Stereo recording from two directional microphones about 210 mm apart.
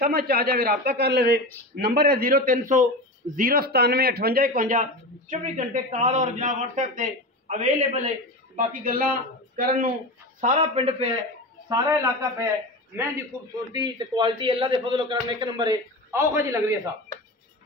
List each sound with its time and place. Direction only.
0.0 s a man's voice: 45° right (ahead or behind)
10.4 s a man's voice: 35° right (ahead or behind)
11.7 s a man's voice: 15° right (ahead or behind)